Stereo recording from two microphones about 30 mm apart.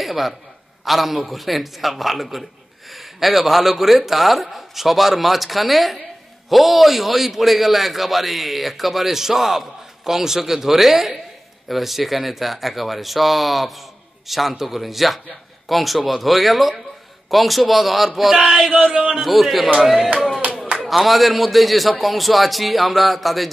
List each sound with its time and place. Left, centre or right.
0.0 s a man's voice: centre
18.7 s speech: right
19.1 s a man's voice: centre